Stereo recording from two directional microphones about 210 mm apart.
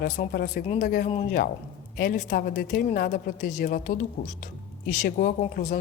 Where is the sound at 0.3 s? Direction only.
45° left (ahead or behind).